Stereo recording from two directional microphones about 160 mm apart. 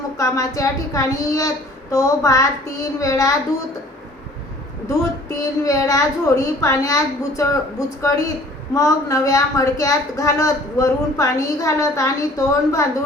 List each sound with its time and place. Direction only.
0.2 s a woman's voice: 20° left (ahead or behind)
4.9 s a woman's voice: 20° left (ahead or behind)